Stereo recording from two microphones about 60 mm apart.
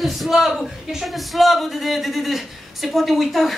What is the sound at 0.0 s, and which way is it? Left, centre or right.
A woman's voice, centre.